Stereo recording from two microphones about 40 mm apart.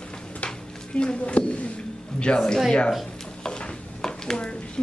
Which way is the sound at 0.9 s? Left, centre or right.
Left.